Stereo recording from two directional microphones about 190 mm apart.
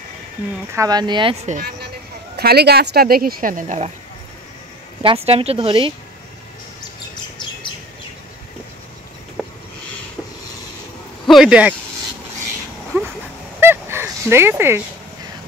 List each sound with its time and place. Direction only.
0.7 s speech: 20° right (ahead or behind)
2.3 s speech: 60° right (ahead or behind); by 3.9 s 40° right (ahead or behind)
5.0 s speech: 30° right (ahead or behind)
9.4 s a sound: 5° right (ahead or behind)
11.2 s speech: 5° right (ahead or behind)
12.9 s a sound: 15° right (ahead or behind)
13.6 s fowl: 10° right (ahead or behind)